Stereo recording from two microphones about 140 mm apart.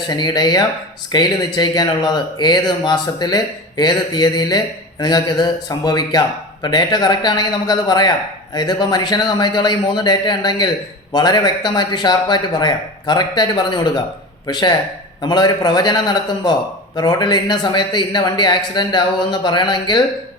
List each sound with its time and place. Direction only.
0.1 s speech: 30° left (ahead or behind)